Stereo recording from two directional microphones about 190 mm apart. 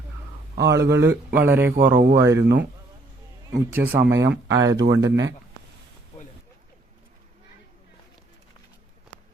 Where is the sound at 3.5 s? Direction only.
10° right (ahead or behind).